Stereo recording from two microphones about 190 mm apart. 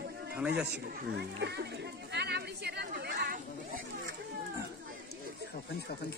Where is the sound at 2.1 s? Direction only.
60° right (ahead or behind).